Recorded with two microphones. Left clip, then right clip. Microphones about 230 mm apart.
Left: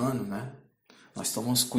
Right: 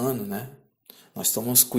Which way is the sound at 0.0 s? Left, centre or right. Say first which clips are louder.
Right 3 dB; right.